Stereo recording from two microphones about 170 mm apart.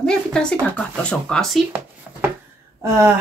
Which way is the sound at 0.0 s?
5° left (ahead or behind).